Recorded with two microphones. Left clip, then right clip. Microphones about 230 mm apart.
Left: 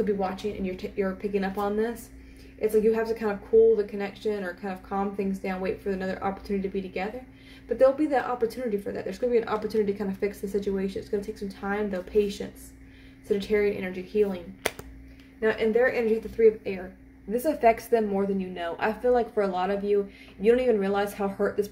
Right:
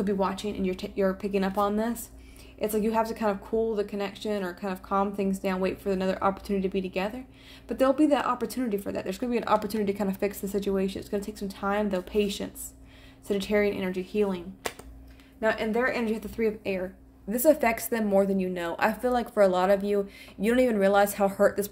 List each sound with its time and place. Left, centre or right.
0.0 s speech: right
15.4 s speech: right